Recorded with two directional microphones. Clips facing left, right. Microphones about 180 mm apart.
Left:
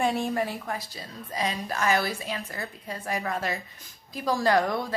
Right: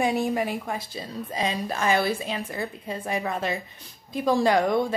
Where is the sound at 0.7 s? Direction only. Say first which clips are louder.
Right 3 dB; 25° right (ahead or behind).